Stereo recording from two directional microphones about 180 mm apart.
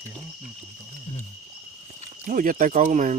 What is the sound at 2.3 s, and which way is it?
Speech, 50° right (ahead or behind).